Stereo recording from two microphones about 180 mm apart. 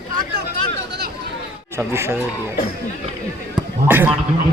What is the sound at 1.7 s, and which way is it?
Speech, 15° right (ahead or behind).